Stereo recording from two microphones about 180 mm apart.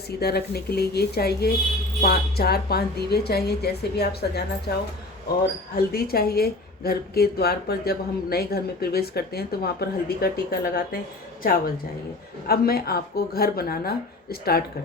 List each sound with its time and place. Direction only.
0.2 s a woman's voice: 60° left (ahead or behind)
12.5 s a woman's voice: 60° left (ahead or behind)